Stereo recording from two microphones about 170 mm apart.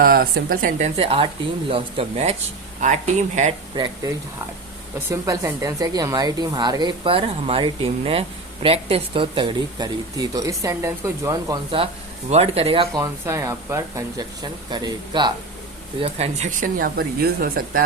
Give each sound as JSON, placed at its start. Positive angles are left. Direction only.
{"t": 0.0, "sound": "speech", "side_deg": -60}
{"t": 0.9, "sound": "speech", "side_deg": -35}
{"t": 4.0, "sound": "speech", "side_deg": -20}
{"t": 12.3, "sound": "speech", "side_deg": -35}
{"t": 13.0, "sound": "speech", "side_deg": -20}
{"t": 16.0, "sound": "speech", "side_deg": -35}